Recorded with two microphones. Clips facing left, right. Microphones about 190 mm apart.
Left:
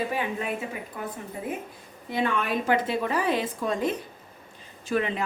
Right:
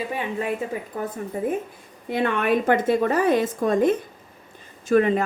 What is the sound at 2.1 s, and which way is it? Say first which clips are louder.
A woman's voice: right 5 dB; 60° right (ahead or behind).